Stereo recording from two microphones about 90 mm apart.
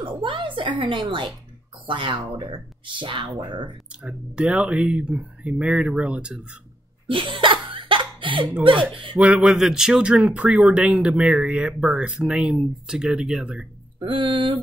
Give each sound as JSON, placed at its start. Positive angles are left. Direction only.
{"t": 0.0, "sound": "music", "side_deg": -70}
{"t": 1.9, "sound": "speech", "side_deg": -65}
{"t": 4.0, "sound": "speech", "side_deg": -10}
{"t": 7.1, "sound": "laughter", "side_deg": -65}
{"t": 8.9, "sound": "a sound", "side_deg": -70}
{"t": 9.4, "sound": "speech", "side_deg": -5}
{"t": 13.9, "sound": "a sound", "side_deg": -70}